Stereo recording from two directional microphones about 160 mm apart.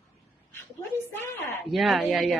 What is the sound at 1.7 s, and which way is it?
Speech, centre (ahead or behind).